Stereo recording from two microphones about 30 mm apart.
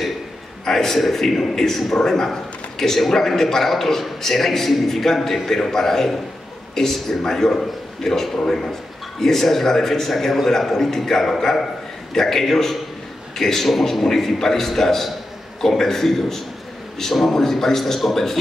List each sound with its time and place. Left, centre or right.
0.7 s a man's voice: centre
13.7 s a man's voice: centre